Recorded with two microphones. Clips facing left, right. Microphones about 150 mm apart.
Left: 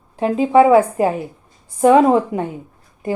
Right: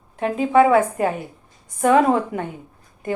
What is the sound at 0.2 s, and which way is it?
Speech, 30° left (ahead or behind).